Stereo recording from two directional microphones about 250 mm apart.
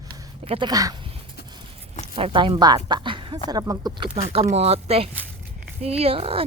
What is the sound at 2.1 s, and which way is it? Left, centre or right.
Speech, right.